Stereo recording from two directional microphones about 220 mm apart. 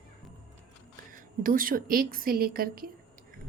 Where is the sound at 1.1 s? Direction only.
40° right (ahead or behind).